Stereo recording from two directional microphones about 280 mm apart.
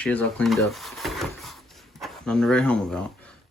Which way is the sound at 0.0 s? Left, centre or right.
Centre.